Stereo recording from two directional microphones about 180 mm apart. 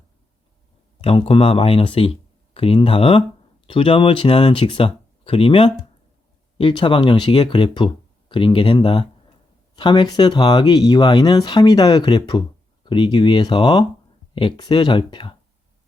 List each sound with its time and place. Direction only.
1.0 s speech: 30° left (ahead or behind)